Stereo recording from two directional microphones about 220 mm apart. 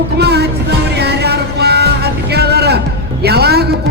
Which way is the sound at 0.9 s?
50° right (ahead or behind).